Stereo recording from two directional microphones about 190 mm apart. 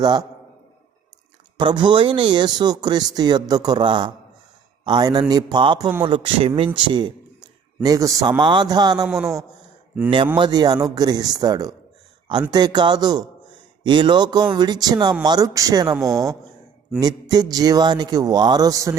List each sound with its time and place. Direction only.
0.0 s speech: 20° right (ahead or behind)
1.5 s speech: 25° right (ahead or behind)
10.3 s speech: 25° right (ahead or behind)
16.0 s a woman's voice: centre (ahead or behind)
17.0 s speech: 20° right (ahead or behind)